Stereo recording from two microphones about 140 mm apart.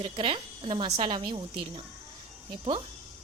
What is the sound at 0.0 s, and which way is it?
A woman's voice, 35° right (ahead or behind).